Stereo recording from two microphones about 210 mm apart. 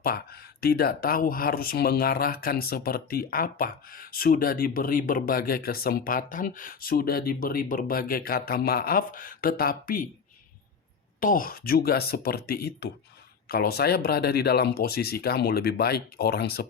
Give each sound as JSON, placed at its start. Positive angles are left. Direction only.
{"t": 0.0, "sound": "speech", "side_deg": 45}
{"t": 11.2, "sound": "speech", "side_deg": 40}